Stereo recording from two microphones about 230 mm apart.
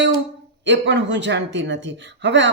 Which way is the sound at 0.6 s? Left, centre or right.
Right.